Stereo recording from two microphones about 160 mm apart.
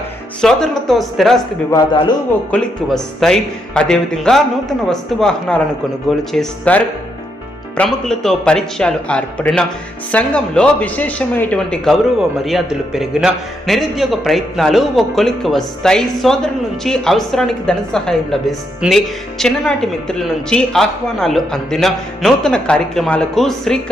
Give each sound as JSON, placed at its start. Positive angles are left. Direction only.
{"t": 0.4, "sound": "a man's voice", "side_deg": 5}
{"t": 1.7, "sound": "speech", "side_deg": 30}
{"t": 2.5, "sound": "a man's voice", "side_deg": 5}